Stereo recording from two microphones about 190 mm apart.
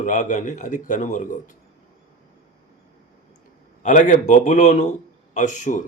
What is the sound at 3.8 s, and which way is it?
A man's voice, 40° left (ahead or behind).